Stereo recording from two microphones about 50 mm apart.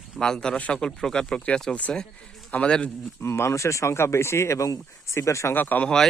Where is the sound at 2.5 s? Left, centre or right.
Left.